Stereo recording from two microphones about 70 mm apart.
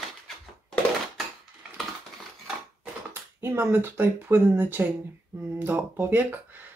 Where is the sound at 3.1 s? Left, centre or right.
Right.